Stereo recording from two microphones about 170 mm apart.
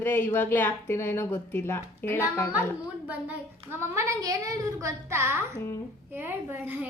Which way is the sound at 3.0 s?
10° right (ahead or behind).